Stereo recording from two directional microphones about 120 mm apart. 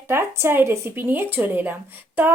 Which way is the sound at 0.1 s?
20° right (ahead or behind).